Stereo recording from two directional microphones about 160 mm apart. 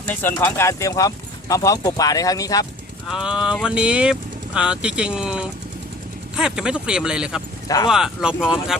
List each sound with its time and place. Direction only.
0.1 s speech: 15° left (ahead or behind)
3.1 s speech: 5° right (ahead or behind)